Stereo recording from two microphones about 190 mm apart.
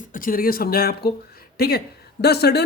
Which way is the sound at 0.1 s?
45° left (ahead or behind).